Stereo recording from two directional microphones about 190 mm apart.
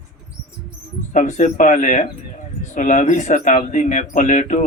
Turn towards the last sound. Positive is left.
turn(degrees=40)  # may be behind; listen again after turning